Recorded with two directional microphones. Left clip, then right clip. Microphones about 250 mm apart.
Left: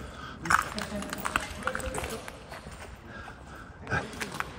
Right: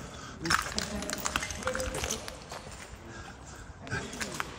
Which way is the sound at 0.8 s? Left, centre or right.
Right.